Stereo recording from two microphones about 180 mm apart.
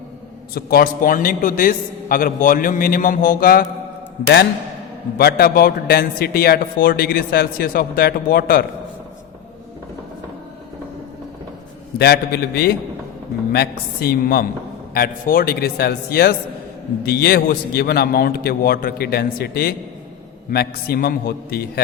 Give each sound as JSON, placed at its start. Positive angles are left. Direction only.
{"t": 0.5, "sound": "a man's voice", "side_deg": 55}
{"t": 5.1, "sound": "a man's voice", "side_deg": 60}
{"t": 11.9, "sound": "a man's voice", "side_deg": 60}